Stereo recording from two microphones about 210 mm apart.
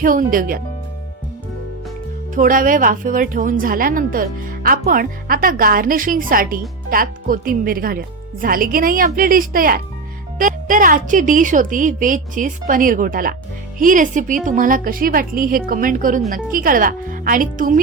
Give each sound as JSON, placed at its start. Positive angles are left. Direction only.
{"t": 0.0, "sound": "speech", "side_deg": -40}
{"t": 2.3, "sound": "speech", "side_deg": -40}